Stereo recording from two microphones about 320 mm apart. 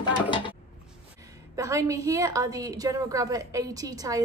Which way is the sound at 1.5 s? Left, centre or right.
Centre.